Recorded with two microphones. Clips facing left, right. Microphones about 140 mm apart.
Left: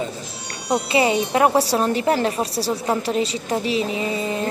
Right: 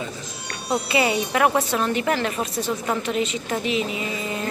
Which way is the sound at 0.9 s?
30° left (ahead or behind).